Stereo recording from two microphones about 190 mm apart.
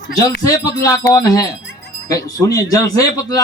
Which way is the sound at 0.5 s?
20° left (ahead or behind).